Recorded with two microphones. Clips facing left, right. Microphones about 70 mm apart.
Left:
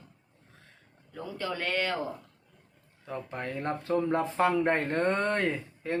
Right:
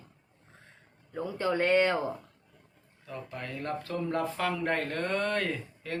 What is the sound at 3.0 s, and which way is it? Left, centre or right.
Speech, left.